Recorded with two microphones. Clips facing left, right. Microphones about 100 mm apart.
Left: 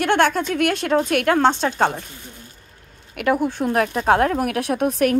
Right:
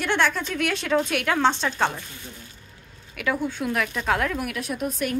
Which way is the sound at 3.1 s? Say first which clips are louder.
Left 6 dB; 55° left (ahead or behind).